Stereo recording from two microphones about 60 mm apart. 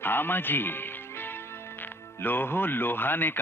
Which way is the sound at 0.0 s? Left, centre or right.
Left.